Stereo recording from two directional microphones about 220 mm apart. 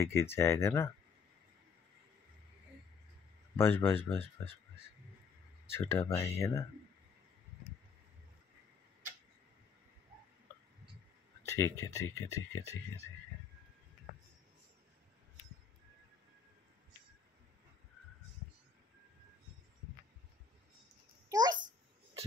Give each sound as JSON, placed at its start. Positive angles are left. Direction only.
{"t": 0.0, "sound": "speech", "side_deg": 10}
{"t": 3.5, "sound": "speech", "side_deg": 10}
{"t": 5.7, "sound": "speech", "side_deg": 10}
{"t": 11.4, "sound": "speech", "side_deg": 15}
{"t": 21.3, "sound": "a sound", "side_deg": -15}
{"t": 21.5, "sound": "a sound", "side_deg": -35}